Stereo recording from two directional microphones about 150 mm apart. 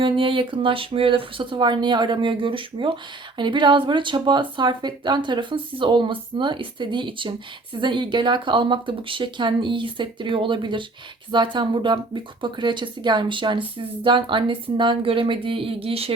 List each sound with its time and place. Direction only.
0.0 s speech: 35° right (ahead or behind)